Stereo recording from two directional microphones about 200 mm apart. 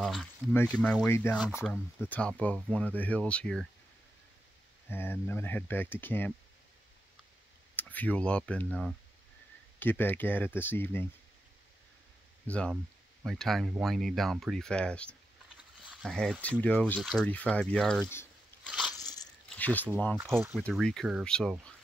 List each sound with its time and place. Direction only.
0.0 s speech: 5° left (ahead or behind)
1.4 s speech: centre (ahead or behind)
4.8 s speech: 10° left (ahead or behind)
7.7 s speech: 10° left (ahead or behind)
12.4 s speech: 5° left (ahead or behind)
18.7 s crunch: centre (ahead or behind)
18.9 s crunch: 20° left (ahead or behind)
19.5 s speech: 10° left (ahead or behind)